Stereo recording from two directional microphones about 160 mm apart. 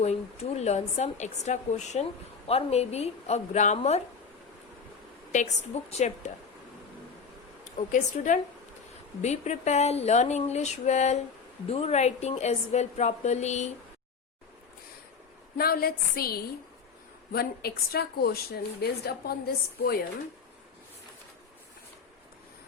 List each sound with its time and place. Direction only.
0.0 s a woman's voice: 45° left (ahead or behind)
5.3 s speech: 45° left (ahead or behind)
7.6 s a woman's voice: 50° left (ahead or behind)
15.5 s a woman's voice: 70° left (ahead or behind)